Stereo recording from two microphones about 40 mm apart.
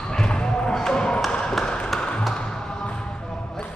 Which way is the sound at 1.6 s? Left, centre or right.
Centre.